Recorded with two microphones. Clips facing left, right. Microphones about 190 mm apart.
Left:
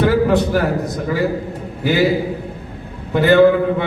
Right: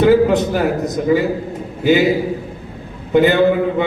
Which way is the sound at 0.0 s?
20° right (ahead or behind).